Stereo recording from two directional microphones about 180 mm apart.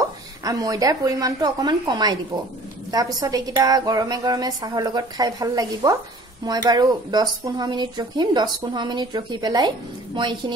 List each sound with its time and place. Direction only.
0.4 s speech: 20° right (ahead or behind)